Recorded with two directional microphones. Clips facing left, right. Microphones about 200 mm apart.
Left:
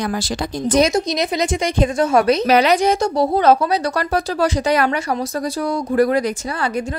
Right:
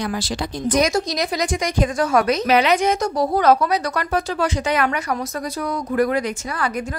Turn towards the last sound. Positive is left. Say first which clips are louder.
# left 2 dB
turn(degrees=30)  # may be behind; listen again after turning